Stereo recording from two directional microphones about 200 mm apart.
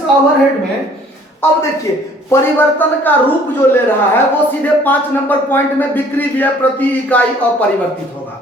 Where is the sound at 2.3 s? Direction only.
10° left (ahead or behind).